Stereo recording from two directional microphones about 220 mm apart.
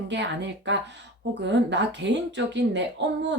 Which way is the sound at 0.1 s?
55° right (ahead or behind).